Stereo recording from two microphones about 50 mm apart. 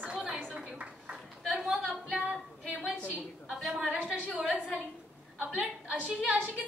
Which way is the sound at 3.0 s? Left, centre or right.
Left.